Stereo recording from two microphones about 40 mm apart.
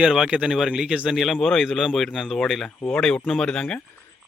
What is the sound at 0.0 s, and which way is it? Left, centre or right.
Speech, centre.